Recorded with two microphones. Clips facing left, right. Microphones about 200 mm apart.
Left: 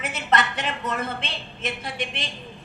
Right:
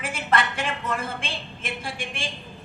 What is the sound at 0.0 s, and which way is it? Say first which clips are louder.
A woman's voice: left 1 dB; 30° right (ahead or behind).